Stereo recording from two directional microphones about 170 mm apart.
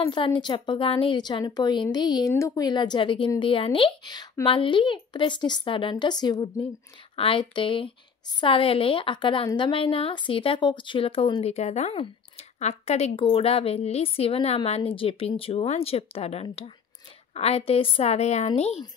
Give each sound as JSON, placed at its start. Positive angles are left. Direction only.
{"t": 0.0, "sound": "a woman's voice", "side_deg": 30}